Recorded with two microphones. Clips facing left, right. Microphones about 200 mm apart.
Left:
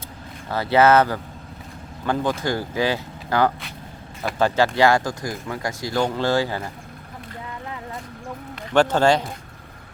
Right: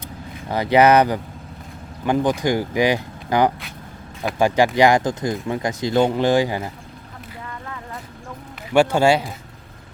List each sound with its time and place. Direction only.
0.4 s speech: 15° right (ahead or behind)
8.7 s speech: 10° right (ahead or behind)